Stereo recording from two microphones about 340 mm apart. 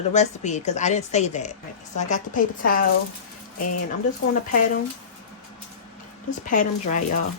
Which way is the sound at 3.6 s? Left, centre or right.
Left.